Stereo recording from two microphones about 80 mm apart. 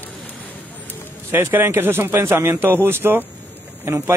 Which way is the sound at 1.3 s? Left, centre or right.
Right.